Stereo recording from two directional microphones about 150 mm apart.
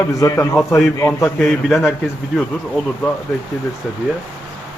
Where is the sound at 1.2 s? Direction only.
Centre (ahead or behind).